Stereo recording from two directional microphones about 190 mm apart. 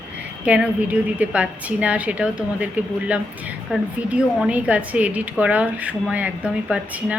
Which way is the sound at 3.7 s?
5° right (ahead or behind).